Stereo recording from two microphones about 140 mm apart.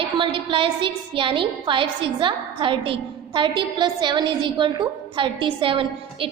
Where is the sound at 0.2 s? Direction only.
40° right (ahead or behind).